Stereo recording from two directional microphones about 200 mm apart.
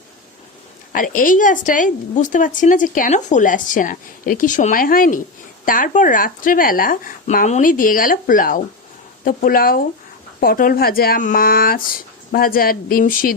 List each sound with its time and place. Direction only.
0.9 s a woman's voice: 40° left (ahead or behind)